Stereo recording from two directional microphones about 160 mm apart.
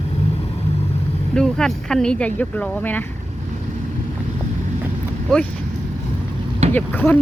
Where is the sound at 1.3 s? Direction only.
5° left (ahead or behind).